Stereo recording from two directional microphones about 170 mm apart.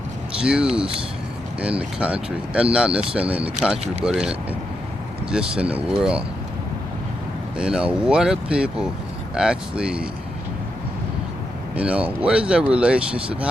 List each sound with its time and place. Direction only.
0.4 s speech: 5° right (ahead or behind)
7.6 s speech: 5° right (ahead or behind)
11.7 s speech: 5° right (ahead or behind)